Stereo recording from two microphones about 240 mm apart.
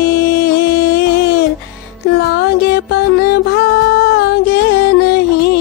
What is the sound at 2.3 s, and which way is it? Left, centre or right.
Music, left.